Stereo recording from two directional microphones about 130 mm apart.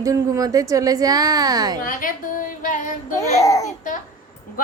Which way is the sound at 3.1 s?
25° left (ahead or behind).